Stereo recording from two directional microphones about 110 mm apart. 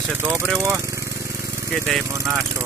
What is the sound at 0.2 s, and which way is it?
Speech, 25° right (ahead or behind).